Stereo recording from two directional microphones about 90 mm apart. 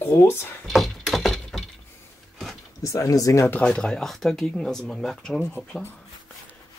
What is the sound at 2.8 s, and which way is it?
Speech, 35° left (ahead or behind).